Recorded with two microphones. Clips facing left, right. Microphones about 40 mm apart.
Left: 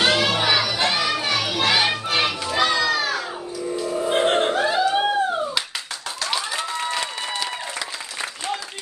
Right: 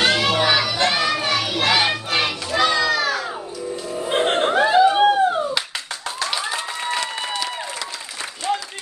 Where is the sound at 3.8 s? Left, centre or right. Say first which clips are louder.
Left 6 dB; centre.